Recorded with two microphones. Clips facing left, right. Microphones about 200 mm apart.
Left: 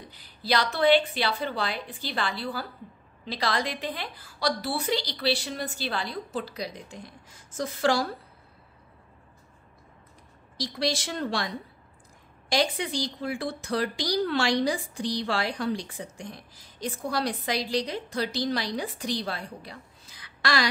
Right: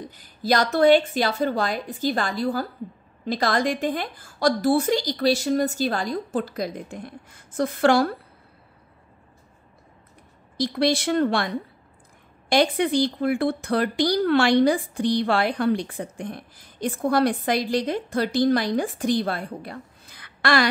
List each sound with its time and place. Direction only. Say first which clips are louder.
0.0 s a woman's voice: right 9 dB; 45° right (ahead or behind)
10.6 s speech: right 7 dB; 55° right (ahead or behind)